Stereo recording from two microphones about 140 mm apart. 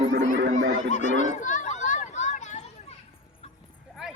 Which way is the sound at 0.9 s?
60° left (ahead or behind).